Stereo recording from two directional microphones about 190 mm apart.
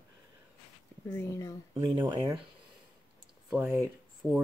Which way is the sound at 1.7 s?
25° right (ahead or behind).